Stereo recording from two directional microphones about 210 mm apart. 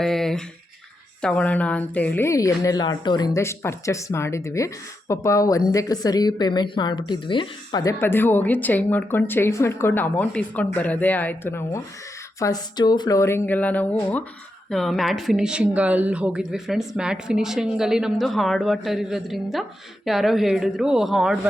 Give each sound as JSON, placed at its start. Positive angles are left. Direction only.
{"t": 0.0, "sound": "a woman's voice", "side_deg": 0}